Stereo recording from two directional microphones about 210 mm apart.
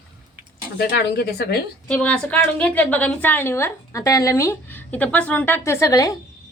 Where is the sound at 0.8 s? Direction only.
50° left (ahead or behind).